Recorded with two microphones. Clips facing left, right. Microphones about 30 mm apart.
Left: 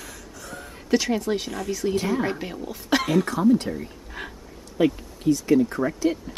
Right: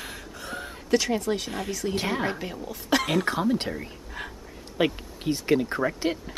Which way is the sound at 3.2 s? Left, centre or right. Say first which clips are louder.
Left 5 dB; right.